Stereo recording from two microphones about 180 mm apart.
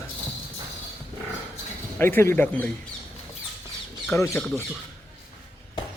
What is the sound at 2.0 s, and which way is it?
Speech, 15° left (ahead or behind).